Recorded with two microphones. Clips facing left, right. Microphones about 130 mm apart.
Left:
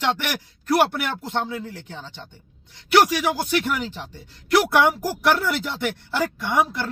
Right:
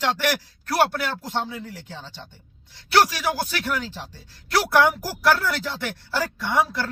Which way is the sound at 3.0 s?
15° left (ahead or behind).